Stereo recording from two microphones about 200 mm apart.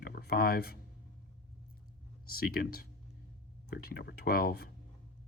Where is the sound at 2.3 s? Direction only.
50° left (ahead or behind).